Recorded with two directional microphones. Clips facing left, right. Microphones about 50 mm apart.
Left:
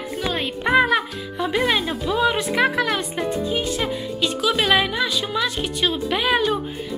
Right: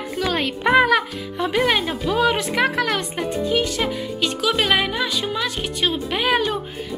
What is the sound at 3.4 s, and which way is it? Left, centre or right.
Speech, right.